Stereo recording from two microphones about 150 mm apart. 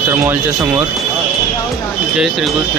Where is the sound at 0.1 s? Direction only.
10° right (ahead or behind).